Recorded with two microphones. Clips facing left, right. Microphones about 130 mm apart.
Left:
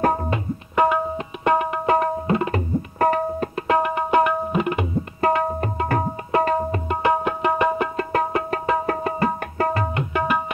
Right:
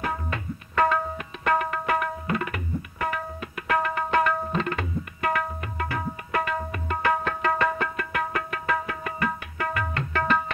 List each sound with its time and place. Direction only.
0.0 s tabla: 45° left (ahead or behind)
0.3 s tabla: 20° left (ahead or behind)
3.0 s tabla: 40° left (ahead or behind)
3.6 s tabla: 20° left (ahead or behind)
5.2 s tabla: 35° left (ahead or behind)
6.9 s music: 20° left (ahead or behind)
8.8 s tabla: 35° left (ahead or behind)
9.9 s tabla: 15° left (ahead or behind)